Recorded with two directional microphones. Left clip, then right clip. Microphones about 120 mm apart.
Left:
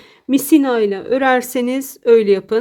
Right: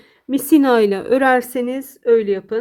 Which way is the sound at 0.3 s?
30° left (ahead or behind).